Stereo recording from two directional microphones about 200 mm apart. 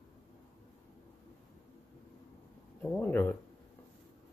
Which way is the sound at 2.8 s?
10° left (ahead or behind).